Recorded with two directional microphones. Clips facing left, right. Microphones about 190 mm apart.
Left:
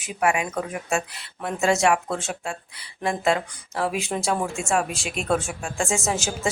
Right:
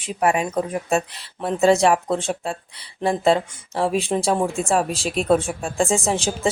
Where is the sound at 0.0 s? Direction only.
35° right (ahead or behind).